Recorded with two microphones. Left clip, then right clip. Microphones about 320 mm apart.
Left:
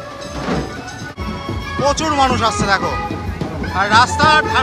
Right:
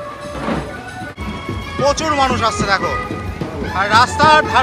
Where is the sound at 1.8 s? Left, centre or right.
Centre.